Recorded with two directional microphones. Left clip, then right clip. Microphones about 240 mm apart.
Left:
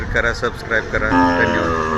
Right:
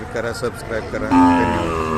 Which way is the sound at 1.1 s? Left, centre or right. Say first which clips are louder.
Right 2 dB; right.